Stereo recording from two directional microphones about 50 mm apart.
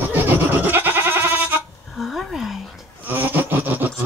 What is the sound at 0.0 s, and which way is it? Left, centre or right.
Goat, right.